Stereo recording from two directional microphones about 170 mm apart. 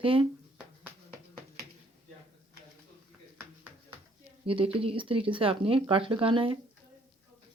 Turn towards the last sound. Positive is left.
turn(degrees=-30)  # may be behind; listen again after turning